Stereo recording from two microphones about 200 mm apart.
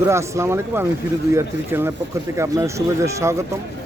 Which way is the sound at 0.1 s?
15° right (ahead or behind).